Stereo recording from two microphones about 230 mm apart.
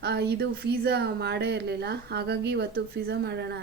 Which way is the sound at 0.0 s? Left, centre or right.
Right.